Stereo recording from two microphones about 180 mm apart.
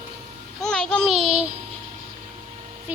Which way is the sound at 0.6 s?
5° left (ahead or behind).